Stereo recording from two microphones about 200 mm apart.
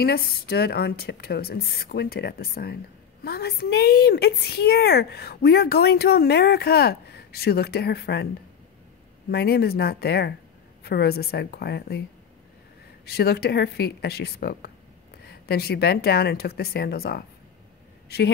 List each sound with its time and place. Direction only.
0.0 s a woman's voice: 50° left (ahead or behind)
9.3 s a woman's voice: 55° left (ahead or behind)
13.0 s a woman's voice: 50° left (ahead or behind)